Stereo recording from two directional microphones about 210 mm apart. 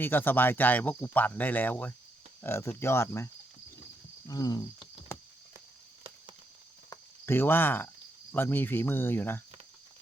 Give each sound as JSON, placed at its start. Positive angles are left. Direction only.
{"t": 0.0, "sound": "speech", "side_deg": 10}
{"t": 4.3, "sound": "a sound", "side_deg": 20}
{"t": 6.9, "sound": "cricket", "side_deg": 10}
{"t": 8.3, "sound": "speech", "side_deg": 10}